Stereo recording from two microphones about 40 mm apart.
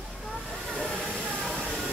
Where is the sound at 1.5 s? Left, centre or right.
Left.